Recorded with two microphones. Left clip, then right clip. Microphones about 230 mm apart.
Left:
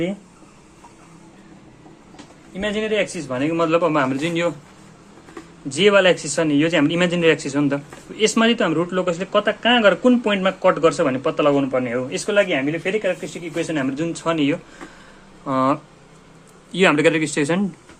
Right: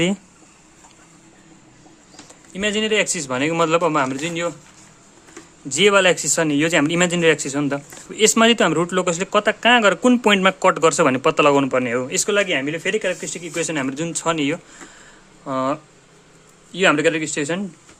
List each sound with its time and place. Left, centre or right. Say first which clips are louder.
2.5 s a man's voice: right 2 dB; right; by 4.5 s centre
5.6 s a man's voice: even; right
15.4 s a man's voice: left 3 dB; centre